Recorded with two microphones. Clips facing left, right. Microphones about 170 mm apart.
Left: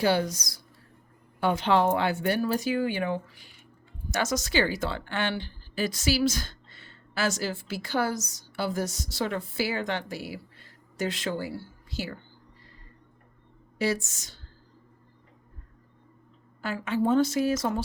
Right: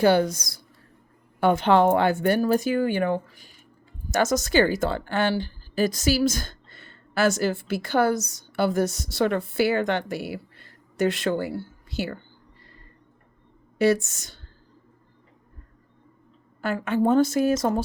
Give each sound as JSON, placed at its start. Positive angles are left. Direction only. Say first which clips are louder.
{"t": 0.0, "sound": "a woman's voice", "louder": "right 6 dB", "side_deg": -55}
{"t": 13.7, "sound": "a woman's voice", "louder": "right 7 dB", "side_deg": -60}
{"t": 16.6, "sound": "speech", "louder": "right 4 dB", "side_deg": -55}